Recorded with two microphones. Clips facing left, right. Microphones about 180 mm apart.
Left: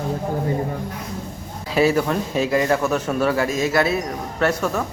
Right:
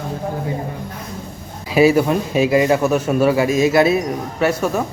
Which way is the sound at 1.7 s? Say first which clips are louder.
Right 5 dB; 10° right (ahead or behind).